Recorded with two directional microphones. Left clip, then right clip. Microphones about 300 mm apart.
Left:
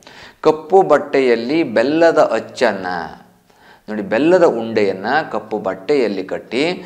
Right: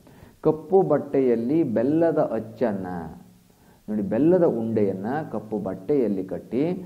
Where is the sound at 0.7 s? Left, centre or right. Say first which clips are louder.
Left 8 dB; centre.